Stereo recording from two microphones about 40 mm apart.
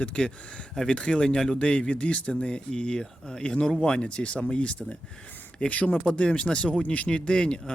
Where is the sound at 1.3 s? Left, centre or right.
Centre.